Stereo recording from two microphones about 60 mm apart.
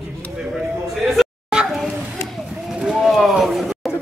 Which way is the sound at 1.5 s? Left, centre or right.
Centre.